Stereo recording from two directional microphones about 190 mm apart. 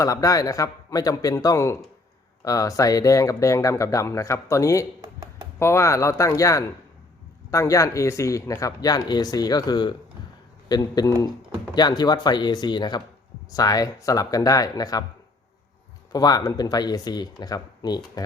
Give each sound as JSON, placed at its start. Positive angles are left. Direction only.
{"t": 0.0, "sound": "speech", "side_deg": 15}
{"t": 16.1, "sound": "speech", "side_deg": 20}